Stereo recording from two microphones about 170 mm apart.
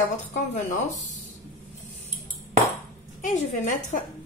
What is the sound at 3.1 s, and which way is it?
Speech, 50° left (ahead or behind).